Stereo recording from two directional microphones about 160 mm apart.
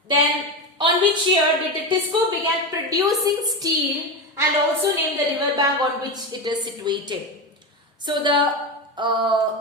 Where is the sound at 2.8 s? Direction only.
20° right (ahead or behind).